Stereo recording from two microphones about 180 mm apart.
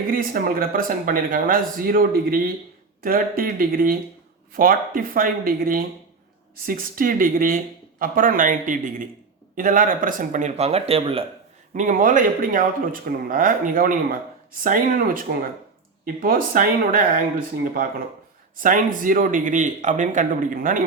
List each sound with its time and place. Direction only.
0.1 s speech: 55° right (ahead or behind); by 11.2 s 30° right (ahead or behind)
11.7 s speech: 45° right (ahead or behind)
18.6 s speech: 50° right (ahead or behind)